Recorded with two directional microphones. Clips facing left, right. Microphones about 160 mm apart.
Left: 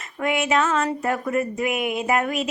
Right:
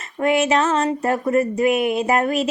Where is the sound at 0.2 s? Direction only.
35° right (ahead or behind).